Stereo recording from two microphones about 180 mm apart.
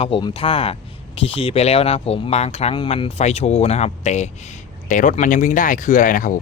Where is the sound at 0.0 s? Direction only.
25° left (ahead or behind).